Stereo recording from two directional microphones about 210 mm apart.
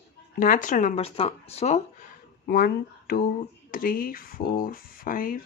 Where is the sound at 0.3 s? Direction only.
40° left (ahead or behind).